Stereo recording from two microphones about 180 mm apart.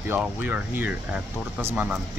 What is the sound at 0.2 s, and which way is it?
Speech, 10° right (ahead or behind).